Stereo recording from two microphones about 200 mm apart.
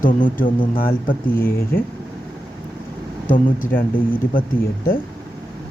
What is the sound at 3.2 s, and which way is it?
Speech, 40° left (ahead or behind).